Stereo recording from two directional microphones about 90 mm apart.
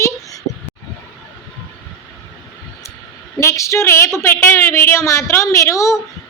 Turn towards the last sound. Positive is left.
turn(degrees=35)  # may be behind; listen again after turning